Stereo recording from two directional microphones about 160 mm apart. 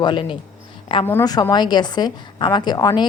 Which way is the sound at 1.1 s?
20° left (ahead or behind).